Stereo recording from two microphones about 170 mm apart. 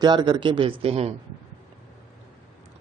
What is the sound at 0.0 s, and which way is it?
Speech, 25° right (ahead or behind).